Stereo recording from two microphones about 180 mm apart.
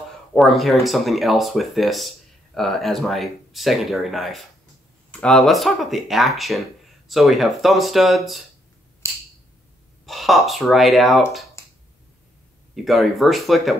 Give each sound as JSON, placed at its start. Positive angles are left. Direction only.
{"t": 0.3, "sound": "speech", "side_deg": 0}
{"t": 10.0, "sound": "speech", "side_deg": 0}
{"t": 11.6, "sound": "finger snapping", "side_deg": 15}
{"t": 12.7, "sound": "speech", "side_deg": 0}